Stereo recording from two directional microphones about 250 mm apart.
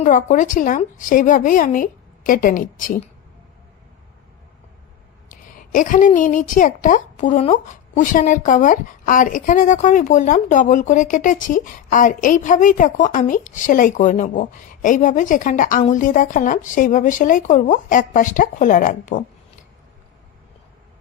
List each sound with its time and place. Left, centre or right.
0.0 s a woman's voice: left
5.3 s a woman's voice: left